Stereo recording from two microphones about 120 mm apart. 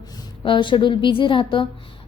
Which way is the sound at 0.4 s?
45° left (ahead or behind).